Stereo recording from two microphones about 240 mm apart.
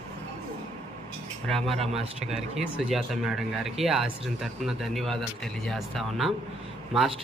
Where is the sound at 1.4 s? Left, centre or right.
Centre.